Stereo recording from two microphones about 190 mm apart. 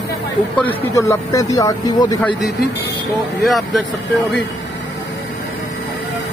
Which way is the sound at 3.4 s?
Centre (ahead or behind).